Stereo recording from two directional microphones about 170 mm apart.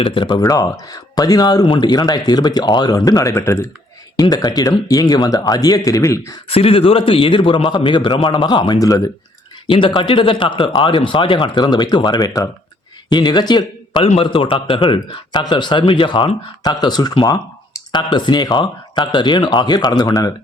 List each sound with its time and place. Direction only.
0.0 s speech: 30° left (ahead or behind)
6.5 s a man's voice: 35° left (ahead or behind)